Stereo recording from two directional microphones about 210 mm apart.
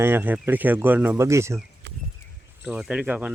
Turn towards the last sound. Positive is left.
turn(degrees=-5)  # may be behind; listen again after turning